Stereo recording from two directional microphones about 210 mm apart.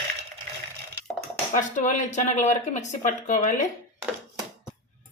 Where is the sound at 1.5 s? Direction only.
35° left (ahead or behind).